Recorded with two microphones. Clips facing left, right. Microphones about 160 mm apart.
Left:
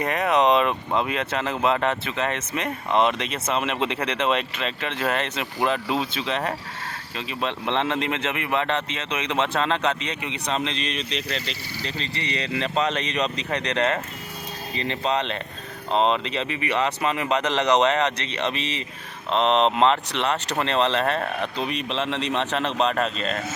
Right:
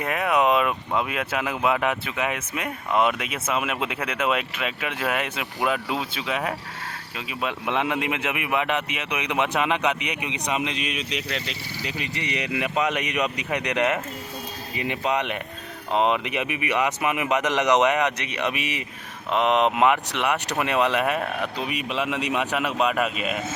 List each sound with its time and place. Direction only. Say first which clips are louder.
0.0 s a man's voice: left 1 dB; 5° right (ahead or behind)
15.9 s speech: left 1 dB; 20° left (ahead or behind)
16.2 s a man's voice: even; 15° right (ahead or behind)